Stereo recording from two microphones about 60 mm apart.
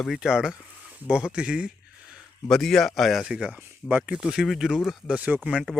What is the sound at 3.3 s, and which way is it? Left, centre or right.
Speech, right.